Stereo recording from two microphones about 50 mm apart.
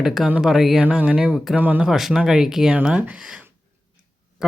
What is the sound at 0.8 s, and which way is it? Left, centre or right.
Speech, right.